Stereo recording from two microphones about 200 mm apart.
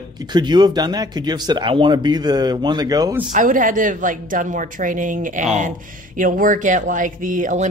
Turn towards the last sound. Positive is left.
turn(degrees=-40)  # may be behind; listen again after turning